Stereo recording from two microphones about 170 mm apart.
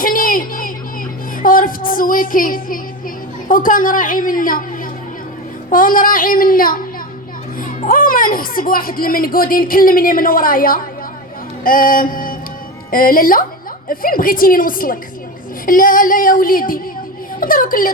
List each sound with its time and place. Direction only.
0.0 s a sound: 55° left (ahead or behind)
1.4 s music: 55° left (ahead or behind)
3.5 s a woman's voice: 55° left (ahead or behind)
5.7 s speech: 55° left (ahead or behind)
11.6 s music: 55° left (ahead or behind)
12.9 s speech: 55° left (ahead or behind)